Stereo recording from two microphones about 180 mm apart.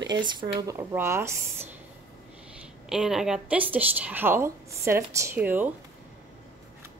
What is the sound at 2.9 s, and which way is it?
A woman's voice, 5° right (ahead or behind).